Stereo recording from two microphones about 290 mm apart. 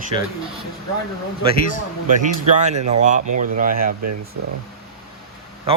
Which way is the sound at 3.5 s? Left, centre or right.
Right.